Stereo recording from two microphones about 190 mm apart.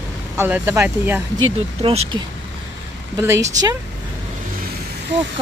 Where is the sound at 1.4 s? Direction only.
25° right (ahead or behind).